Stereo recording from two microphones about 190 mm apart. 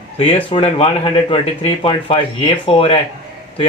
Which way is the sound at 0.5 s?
30° left (ahead or behind).